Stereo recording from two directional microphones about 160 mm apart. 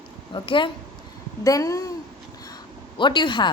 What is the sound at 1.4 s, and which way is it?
Speech, 20° left (ahead or behind).